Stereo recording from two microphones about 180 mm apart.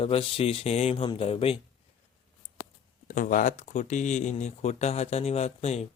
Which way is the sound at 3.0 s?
50° left (ahead or behind).